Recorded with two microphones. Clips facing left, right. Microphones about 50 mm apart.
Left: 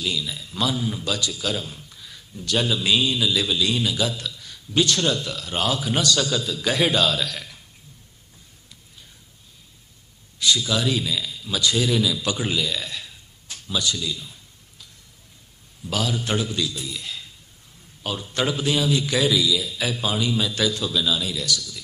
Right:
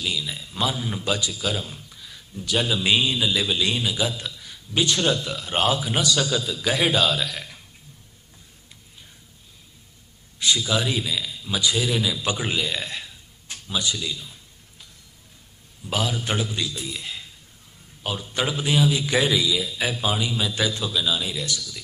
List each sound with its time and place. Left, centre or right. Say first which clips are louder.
0.0 s a man's voice: left 1 dB; centre
0.3 s a man's voice: left 1 dB; right
1.3 s speech: even; centre
2.8 s a man's voice: even; right
5.8 s a man's voice: left 1 dB; centre
10.4 s a man's voice: left 1 dB; centre
12.2 s a man's voice: left 1 dB; right
13.7 s a man's voice: left 1 dB; centre
15.9 s a man's voice: left 1 dB; centre
18.0 s a man's voice: left 1 dB; centre
19.1 s a man's voice: left 2 dB; right